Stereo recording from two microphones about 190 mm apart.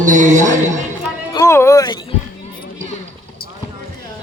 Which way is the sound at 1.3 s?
15° left (ahead or behind).